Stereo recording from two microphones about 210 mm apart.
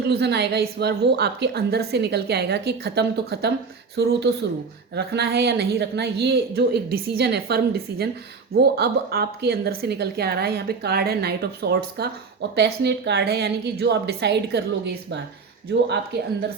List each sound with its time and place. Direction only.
0.1 s a woman's voice: 50° right (ahead or behind)